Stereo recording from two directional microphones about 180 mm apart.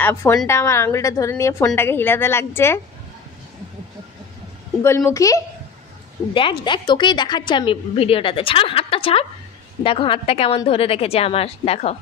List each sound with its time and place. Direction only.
0.0 s a woman's voice: 15° left (ahead or behind)
4.8 s a woman's voice: 15° left (ahead or behind); by 12.0 s 35° left (ahead or behind)